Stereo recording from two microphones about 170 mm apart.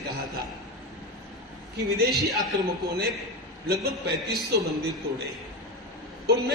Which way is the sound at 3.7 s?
70° right (ahead or behind).